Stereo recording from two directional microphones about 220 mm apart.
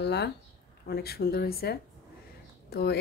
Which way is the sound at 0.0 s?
50° left (ahead or behind).